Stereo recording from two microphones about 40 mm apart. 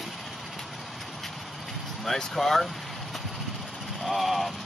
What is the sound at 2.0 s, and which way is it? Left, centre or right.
Speech, centre.